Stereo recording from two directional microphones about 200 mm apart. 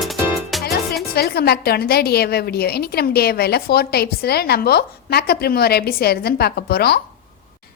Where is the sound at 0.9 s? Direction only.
50° left (ahead or behind).